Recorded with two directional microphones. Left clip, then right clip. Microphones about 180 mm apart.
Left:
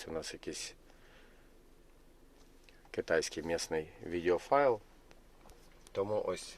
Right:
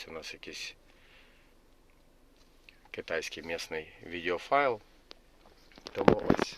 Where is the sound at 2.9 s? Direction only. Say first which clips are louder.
Left 2 dB; 30° left (ahead or behind).